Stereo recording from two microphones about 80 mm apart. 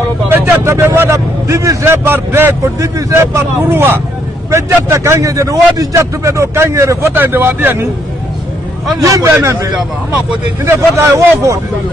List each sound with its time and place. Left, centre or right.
0.3 s a man's voice: right
9.0 s a man's voice: right
10.6 s a man's voice: right